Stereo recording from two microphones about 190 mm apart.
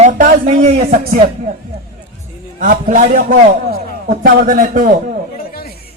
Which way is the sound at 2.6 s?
45° right (ahead or behind).